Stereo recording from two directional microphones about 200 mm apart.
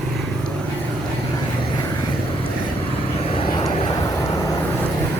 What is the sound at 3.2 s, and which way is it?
Vehicle, 30° left (ahead or behind).